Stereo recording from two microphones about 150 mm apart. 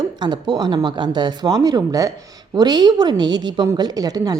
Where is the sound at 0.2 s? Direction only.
30° right (ahead or behind).